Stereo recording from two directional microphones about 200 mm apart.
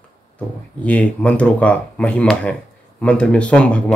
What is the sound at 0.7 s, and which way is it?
Speech, 5° left (ahead or behind).